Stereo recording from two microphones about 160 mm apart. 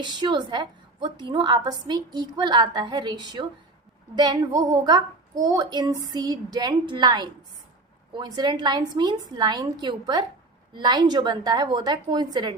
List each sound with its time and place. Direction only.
0.0 s a woman's voice: 30° right (ahead or behind)